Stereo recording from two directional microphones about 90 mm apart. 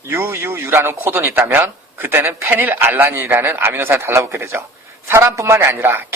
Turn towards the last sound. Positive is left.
turn(degrees=-25)  # may be behind; listen again after turning